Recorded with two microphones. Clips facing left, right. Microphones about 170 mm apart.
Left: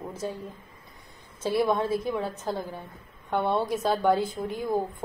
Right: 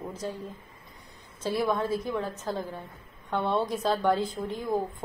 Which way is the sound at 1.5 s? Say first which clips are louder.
Left 3 dB; 15° left (ahead or behind).